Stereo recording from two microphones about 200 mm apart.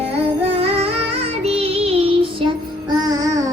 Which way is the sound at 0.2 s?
30° right (ahead or behind).